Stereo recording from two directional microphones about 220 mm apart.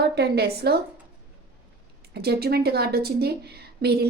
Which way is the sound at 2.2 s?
45° right (ahead or behind).